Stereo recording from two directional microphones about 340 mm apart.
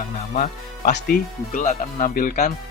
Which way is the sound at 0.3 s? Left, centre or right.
Left.